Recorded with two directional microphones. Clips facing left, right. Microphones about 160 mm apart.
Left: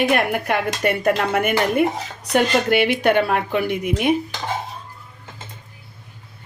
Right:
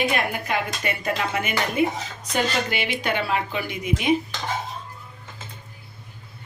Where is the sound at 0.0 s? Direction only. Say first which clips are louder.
Left 5 dB; 55° left (ahead or behind).